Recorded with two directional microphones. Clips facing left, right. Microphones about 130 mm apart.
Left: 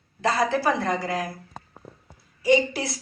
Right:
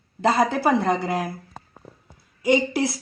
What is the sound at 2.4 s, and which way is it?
Speech, 20° right (ahead or behind).